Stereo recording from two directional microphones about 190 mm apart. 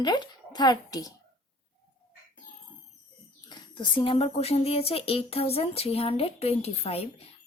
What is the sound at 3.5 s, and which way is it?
Speech, 25° left (ahead or behind).